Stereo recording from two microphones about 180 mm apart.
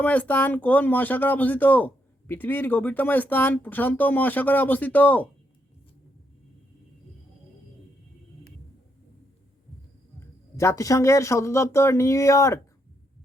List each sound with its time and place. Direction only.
0.0 s speech: 10° left (ahead or behind)
10.6 s speech: 15° left (ahead or behind)